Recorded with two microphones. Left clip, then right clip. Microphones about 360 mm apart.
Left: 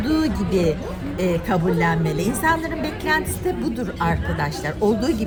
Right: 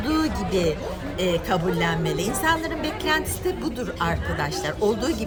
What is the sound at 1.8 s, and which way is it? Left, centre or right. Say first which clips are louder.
A woman's voice: left 3 dB; centre.